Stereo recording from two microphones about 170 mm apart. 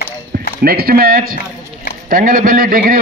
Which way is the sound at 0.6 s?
60° right (ahead or behind).